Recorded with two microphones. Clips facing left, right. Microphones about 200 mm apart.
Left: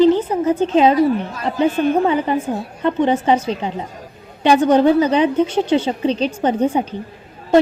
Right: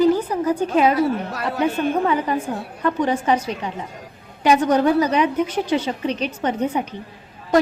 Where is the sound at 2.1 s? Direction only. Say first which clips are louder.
Left 3 dB; 30° left (ahead or behind).